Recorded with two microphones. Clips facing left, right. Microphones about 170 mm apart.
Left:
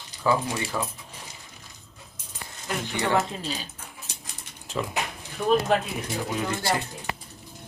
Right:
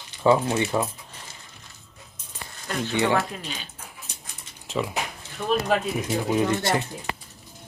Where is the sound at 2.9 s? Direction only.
15° right (ahead or behind).